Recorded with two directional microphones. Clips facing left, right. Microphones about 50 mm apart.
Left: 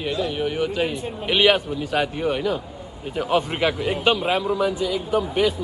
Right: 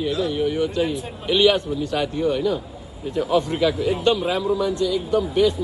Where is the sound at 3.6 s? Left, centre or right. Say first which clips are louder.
Right 2 dB; centre.